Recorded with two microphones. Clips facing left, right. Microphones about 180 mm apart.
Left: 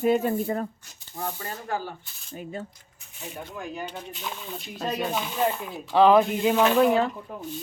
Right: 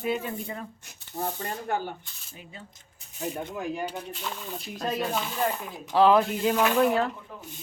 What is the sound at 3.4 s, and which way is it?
Speech, 20° right (ahead or behind).